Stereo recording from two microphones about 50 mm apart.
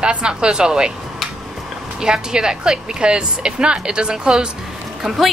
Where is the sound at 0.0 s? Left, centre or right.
Centre.